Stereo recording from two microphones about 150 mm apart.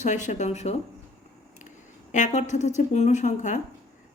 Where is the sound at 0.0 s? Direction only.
55° left (ahead or behind).